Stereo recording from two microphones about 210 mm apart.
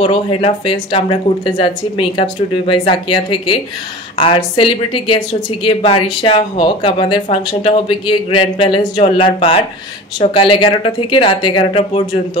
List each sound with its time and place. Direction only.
0.0 s speech: 25° left (ahead or behind)